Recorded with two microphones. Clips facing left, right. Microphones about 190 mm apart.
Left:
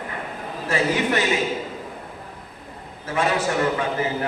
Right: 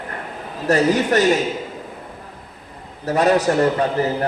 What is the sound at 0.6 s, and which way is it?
Speech, 40° right (ahead or behind).